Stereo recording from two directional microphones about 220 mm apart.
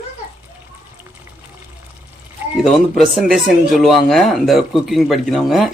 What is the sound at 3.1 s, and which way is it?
Speech, centre (ahead or behind).